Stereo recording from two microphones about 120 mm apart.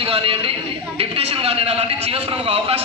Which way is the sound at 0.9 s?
55° right (ahead or behind).